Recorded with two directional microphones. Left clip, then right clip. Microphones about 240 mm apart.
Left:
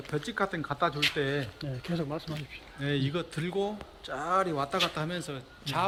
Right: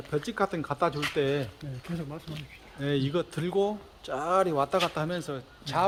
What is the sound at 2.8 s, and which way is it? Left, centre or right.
A man's voice, right.